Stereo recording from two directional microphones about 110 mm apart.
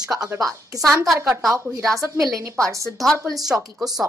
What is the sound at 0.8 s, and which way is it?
Speech, centre (ahead or behind).